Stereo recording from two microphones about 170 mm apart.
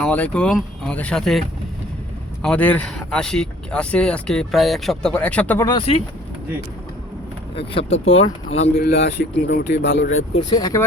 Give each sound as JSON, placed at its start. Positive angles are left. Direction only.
{"t": 0.0, "sound": "speech", "side_deg": 10}
{"t": 5.6, "sound": "speech", "side_deg": 30}
{"t": 7.5, "sound": "speech", "side_deg": 30}
{"t": 8.8, "sound": "speech", "side_deg": 85}
{"t": 10.5, "sound": "speech", "side_deg": 20}